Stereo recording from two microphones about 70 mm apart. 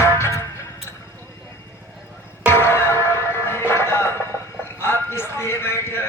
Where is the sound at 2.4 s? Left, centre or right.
Left.